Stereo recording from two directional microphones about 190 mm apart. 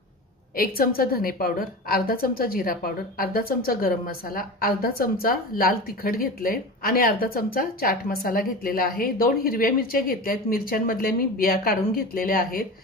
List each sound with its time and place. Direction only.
0.6 s a woman's voice: 50° left (ahead or behind)